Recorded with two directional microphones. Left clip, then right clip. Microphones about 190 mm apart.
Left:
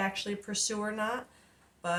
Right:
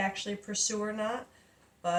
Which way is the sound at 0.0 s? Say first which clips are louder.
Even; 30° left (ahead or behind).